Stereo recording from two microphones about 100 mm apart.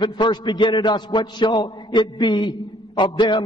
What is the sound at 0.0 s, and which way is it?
A man's voice, 50° left (ahead or behind).